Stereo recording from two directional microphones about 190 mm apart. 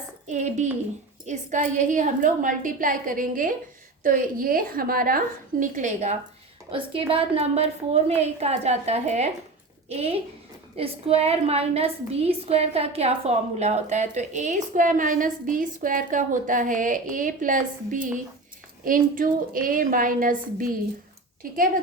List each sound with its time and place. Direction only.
0.3 s a woman's voice: 40° right (ahead or behind)
6.7 s a woman's voice: 30° right (ahead or behind); by 20.7 s 45° right (ahead or behind)